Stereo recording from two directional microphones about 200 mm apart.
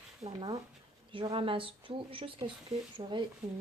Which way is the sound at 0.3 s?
20° right (ahead or behind).